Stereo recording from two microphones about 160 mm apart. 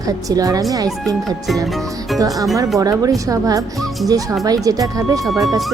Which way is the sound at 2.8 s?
20° right (ahead or behind).